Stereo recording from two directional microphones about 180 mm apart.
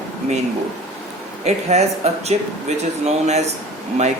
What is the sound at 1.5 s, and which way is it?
Speech, 35° right (ahead or behind).